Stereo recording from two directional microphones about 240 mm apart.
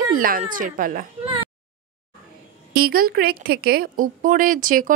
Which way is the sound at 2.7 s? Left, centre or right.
Right.